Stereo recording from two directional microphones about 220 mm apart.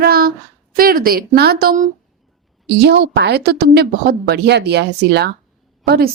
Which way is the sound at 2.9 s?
50° right (ahead or behind).